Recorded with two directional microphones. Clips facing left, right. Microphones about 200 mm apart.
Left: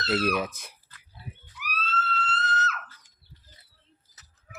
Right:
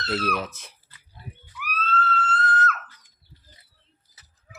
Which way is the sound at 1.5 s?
50° right (ahead or behind).